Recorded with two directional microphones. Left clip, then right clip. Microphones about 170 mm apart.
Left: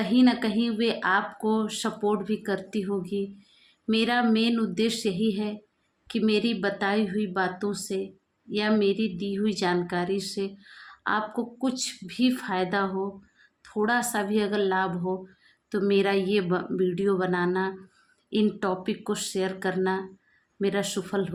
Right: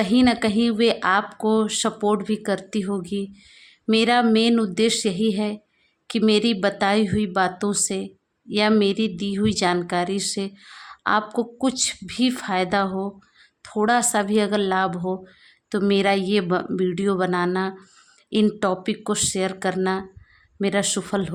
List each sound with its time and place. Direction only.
0.0 s a woman's voice: 40° right (ahead or behind)